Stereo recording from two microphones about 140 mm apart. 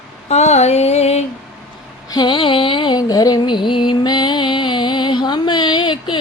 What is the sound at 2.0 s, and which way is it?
Music, 30° left (ahead or behind).